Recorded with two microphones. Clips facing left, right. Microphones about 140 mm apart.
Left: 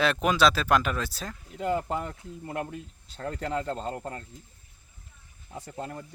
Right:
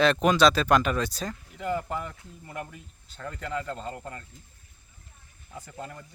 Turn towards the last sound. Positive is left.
turn(degrees=30)  # may be behind; listen again after turning